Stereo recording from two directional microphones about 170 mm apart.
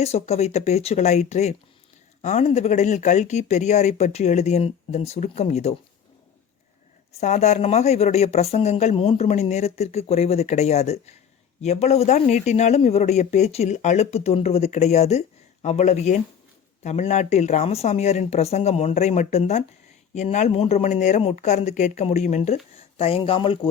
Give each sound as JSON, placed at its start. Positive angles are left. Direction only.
{"t": 0.0, "sound": "speech", "side_deg": 40}
{"t": 7.2, "sound": "speech", "side_deg": 40}